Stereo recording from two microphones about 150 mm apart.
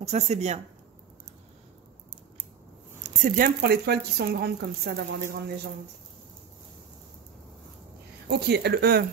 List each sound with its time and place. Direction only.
0.0 s speech: 45° right (ahead or behind)
3.2 s speech: 70° right (ahead or behind); by 5.4 s 90° right
8.3 s speech: 90° right